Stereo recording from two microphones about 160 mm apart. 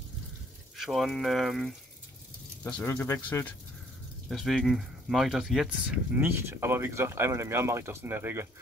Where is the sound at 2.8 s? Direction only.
15° left (ahead or behind).